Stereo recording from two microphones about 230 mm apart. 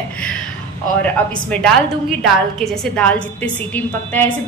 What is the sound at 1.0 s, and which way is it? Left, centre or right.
A woman's voice, centre.